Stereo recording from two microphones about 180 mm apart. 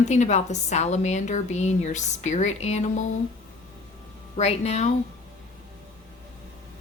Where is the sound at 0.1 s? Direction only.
40° left (ahead or behind).